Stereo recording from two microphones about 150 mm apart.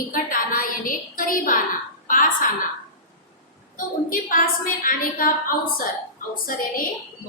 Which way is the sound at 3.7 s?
65° left (ahead or behind).